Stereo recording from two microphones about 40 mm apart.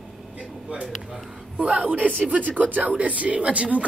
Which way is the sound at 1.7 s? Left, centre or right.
Right.